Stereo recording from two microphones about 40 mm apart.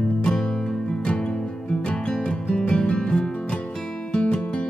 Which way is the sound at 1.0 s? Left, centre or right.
Left.